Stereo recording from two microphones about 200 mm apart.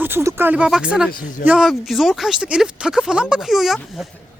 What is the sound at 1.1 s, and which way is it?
Speech, 45° left (ahead or behind).